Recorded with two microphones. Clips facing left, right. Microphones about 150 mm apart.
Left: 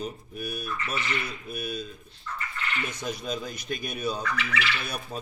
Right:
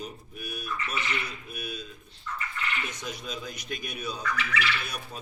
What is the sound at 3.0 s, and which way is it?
A man's voice, 40° left (ahead or behind).